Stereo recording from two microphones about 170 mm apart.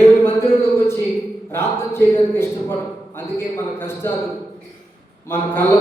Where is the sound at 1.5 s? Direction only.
15° left (ahead or behind).